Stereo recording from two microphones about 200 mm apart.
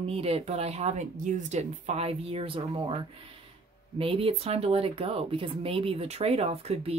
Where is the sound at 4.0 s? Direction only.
30° right (ahead or behind).